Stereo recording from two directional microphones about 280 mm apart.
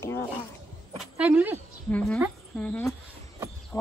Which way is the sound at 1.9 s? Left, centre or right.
Centre.